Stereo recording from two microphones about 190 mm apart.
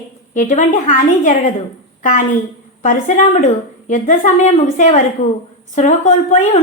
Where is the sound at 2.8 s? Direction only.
40° left (ahead or behind).